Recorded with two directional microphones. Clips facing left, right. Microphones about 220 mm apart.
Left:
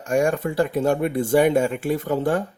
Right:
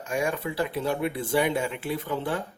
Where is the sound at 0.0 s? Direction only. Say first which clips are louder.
Left 7 dB; 45° left (ahead or behind).